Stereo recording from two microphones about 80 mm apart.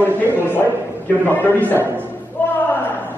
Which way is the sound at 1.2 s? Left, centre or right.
Left.